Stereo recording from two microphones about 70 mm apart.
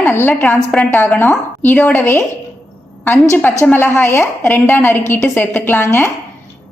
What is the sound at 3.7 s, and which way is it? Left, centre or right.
A woman's voice, left.